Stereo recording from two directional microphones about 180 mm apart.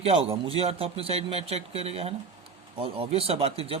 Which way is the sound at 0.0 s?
30° right (ahead or behind).